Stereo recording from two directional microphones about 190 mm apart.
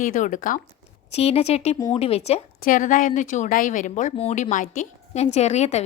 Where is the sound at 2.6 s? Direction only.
45° left (ahead or behind).